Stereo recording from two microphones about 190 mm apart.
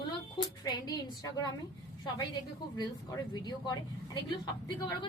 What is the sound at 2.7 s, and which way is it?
Speech, 20° left (ahead or behind).